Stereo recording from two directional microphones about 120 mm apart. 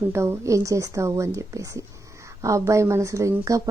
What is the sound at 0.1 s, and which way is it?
A woman's voice, 25° right (ahead or behind).